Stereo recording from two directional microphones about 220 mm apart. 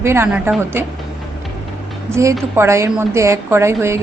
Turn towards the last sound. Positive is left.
turn(degrees=-10)  # may be behind; listen again after turning